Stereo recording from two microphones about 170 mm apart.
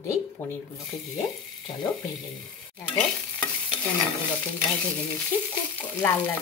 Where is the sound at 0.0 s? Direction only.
15° left (ahead or behind).